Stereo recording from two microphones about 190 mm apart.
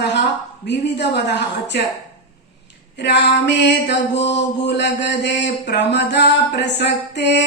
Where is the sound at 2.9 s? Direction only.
65° left (ahead or behind).